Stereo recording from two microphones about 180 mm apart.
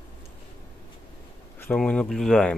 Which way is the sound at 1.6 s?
10° left (ahead or behind).